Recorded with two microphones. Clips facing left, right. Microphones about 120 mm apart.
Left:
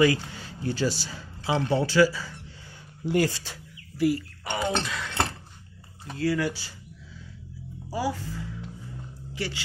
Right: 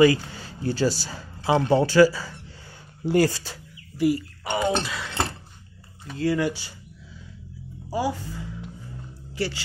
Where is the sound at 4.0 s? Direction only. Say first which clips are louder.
Right 2 dB; 15° right (ahead or behind).